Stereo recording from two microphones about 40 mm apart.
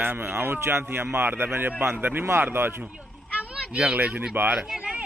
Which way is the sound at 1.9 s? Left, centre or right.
Right.